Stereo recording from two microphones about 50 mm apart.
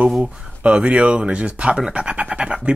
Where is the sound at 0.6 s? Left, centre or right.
Right.